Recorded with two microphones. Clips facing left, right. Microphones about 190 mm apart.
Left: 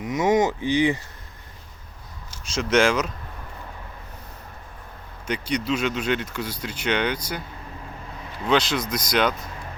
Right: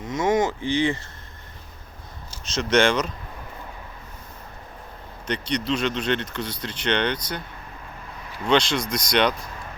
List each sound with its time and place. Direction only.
0.0 s speech: 15° left (ahead or behind)
2.6 s speech: 5° left (ahead or behind)
5.2 s speech: 10° left (ahead or behind)
8.4 s speech: 5° left (ahead or behind)